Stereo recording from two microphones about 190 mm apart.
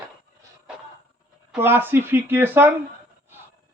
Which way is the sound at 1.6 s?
10° right (ahead or behind).